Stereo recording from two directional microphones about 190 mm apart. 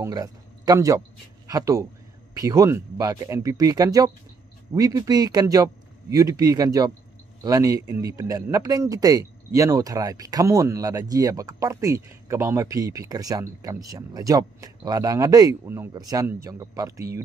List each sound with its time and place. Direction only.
0.0 s a man's voice: 20° right (ahead or behind)